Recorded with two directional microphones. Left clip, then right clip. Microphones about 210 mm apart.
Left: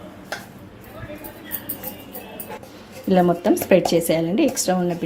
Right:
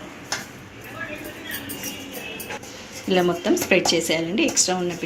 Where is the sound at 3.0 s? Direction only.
45° left (ahead or behind).